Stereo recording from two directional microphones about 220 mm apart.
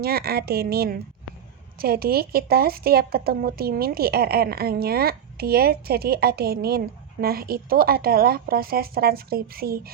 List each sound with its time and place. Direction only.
0.0 s speech: 45° right (ahead or behind)